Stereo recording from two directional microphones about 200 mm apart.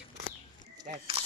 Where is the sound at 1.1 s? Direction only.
30° right (ahead or behind).